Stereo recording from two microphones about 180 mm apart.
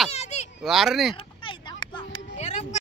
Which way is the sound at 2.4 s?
40° left (ahead or behind).